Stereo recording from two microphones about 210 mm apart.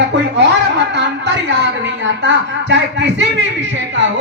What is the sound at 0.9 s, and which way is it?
Speech, 55° right (ahead or behind).